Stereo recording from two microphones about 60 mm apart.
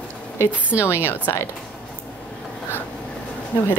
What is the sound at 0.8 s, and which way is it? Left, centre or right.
Speech, left.